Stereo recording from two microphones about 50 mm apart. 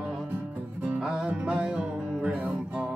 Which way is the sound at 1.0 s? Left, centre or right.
Centre.